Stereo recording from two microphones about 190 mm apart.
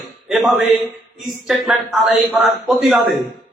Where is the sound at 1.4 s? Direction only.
Centre (ahead or behind).